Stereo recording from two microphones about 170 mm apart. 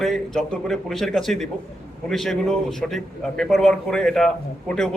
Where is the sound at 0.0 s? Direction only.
5° left (ahead or behind).